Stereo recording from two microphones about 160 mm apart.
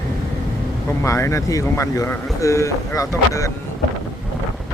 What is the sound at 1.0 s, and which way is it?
Speech, 20° left (ahead or behind).